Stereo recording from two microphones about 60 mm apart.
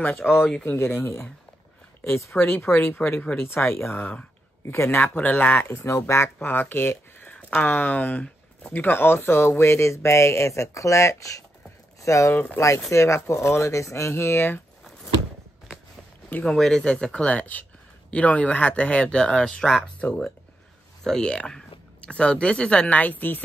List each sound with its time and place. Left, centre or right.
0.2 s speech: centre
0.7 s speech: left
2.3 s speech: left
5.0 s speech: left
5.9 s speech: left
16.4 s speech: centre
21.0 s speech: centre; by 23.4 s left